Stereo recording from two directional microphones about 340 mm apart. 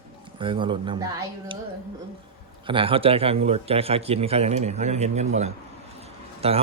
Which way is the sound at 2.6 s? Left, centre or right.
Centre.